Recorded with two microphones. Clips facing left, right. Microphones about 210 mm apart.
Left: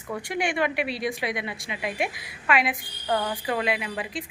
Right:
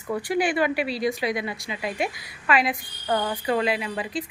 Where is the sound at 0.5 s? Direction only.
35° right (ahead or behind).